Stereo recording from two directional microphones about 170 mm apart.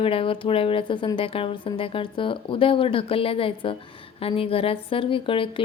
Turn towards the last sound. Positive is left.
turn(degrees=30)  # may be behind; listen again after turning